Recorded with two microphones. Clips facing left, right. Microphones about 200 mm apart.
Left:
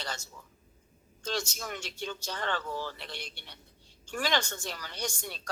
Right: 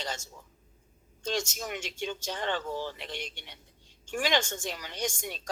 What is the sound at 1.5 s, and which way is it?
A woman's voice, 20° right (ahead or behind).